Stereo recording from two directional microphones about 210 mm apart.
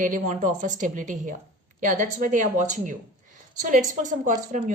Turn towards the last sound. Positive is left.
turn(degrees=-35)  # may be behind; listen again after turning